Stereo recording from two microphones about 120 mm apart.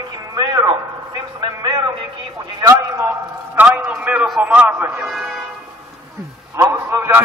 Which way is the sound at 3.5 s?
10° right (ahead or behind).